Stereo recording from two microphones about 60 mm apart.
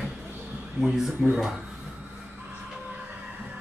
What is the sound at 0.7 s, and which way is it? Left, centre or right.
Speech, centre.